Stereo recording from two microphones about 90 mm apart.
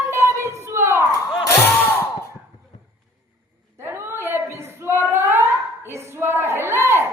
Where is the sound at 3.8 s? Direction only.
25° right (ahead or behind).